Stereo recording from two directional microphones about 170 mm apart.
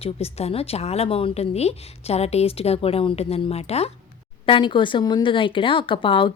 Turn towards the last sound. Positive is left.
turn(degrees=30)  # may be behind; listen again after turning